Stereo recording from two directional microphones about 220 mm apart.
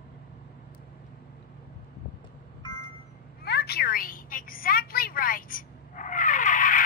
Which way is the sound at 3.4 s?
50° left (ahead or behind).